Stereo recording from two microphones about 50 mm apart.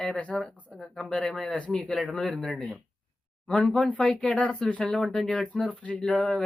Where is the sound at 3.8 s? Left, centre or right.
Left.